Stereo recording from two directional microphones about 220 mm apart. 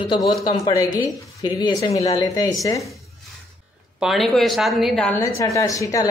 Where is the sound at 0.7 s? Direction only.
20° left (ahead or behind).